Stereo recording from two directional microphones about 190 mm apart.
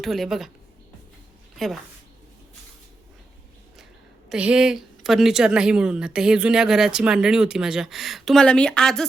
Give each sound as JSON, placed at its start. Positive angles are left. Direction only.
{"t": 0.0, "sound": "speech", "side_deg": 0}
{"t": 1.5, "sound": "speech", "side_deg": 0}
{"t": 4.3, "sound": "speech", "side_deg": -5}